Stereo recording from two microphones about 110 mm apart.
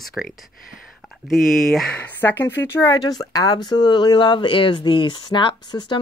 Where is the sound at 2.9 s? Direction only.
35° left (ahead or behind).